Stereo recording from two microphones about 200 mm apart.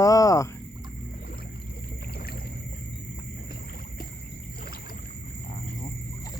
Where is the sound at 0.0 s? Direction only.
15° left (ahead or behind).